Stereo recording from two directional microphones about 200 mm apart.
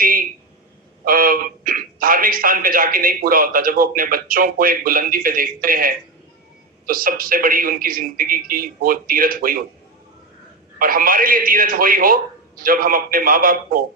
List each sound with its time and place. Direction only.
0.0 s a sound: 45° right (ahead or behind)
1.0 s a man's voice: 45° right (ahead or behind)
10.8 s a man's voice: 45° right (ahead or behind)